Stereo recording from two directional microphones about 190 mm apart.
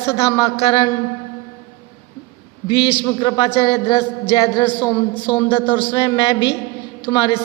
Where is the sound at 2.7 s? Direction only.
30° left (ahead or behind).